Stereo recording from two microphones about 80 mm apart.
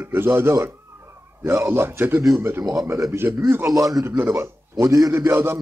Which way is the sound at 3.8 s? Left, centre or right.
Right.